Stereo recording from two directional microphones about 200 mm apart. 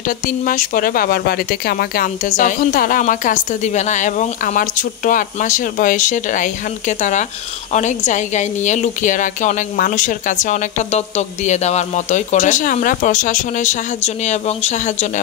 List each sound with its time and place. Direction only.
0.5 s a woman's voice: 45° left (ahead or behind)